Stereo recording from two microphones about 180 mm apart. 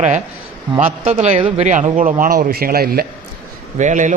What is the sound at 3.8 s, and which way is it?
Speech, 45° right (ahead or behind).